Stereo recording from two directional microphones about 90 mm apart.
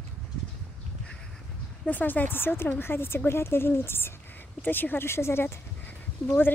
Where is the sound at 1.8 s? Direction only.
20° left (ahead or behind).